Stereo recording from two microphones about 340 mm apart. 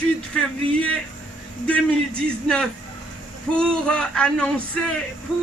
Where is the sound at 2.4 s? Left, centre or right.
Centre.